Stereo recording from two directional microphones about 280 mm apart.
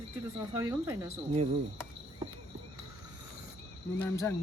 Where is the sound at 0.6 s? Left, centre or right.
Centre.